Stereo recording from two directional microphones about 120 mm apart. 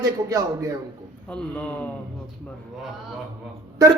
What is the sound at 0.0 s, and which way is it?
Speech, 30° right (ahead or behind).